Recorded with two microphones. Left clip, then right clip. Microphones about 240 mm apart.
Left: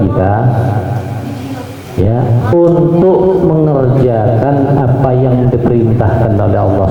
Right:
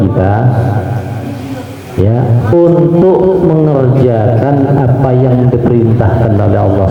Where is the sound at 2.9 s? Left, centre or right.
Right.